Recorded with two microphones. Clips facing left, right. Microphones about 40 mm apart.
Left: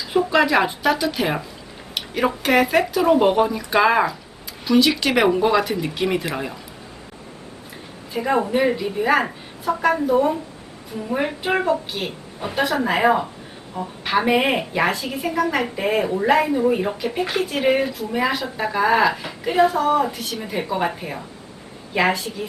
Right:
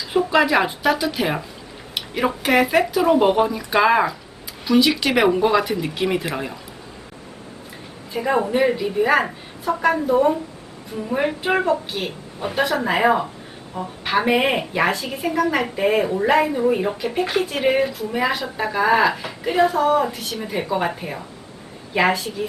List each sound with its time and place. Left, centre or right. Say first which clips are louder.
0.1 s a woman's voice: even; centre
8.1 s a woman's voice: even; centre